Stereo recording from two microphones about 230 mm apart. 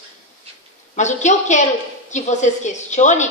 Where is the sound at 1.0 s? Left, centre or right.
Left.